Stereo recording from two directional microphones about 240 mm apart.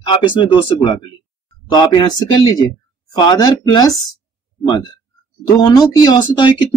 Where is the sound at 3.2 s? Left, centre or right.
Centre.